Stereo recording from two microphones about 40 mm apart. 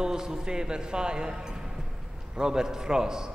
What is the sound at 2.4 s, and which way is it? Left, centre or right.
Speech, centre.